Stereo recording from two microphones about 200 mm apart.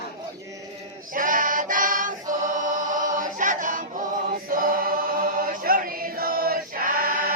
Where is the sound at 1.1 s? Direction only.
40° right (ahead or behind).